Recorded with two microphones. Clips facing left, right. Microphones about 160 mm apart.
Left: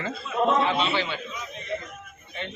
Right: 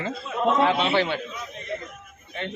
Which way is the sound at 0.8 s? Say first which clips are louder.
Right 4 dB; 60° right (ahead or behind).